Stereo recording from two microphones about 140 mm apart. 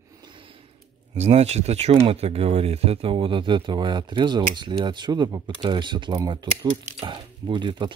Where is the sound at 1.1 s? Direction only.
50° right (ahead or behind).